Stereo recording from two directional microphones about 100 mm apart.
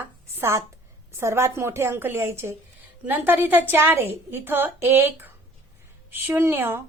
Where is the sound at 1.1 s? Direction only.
25° right (ahead or behind).